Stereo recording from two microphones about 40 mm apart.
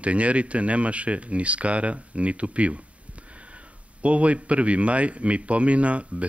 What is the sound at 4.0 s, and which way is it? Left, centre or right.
Speech, right.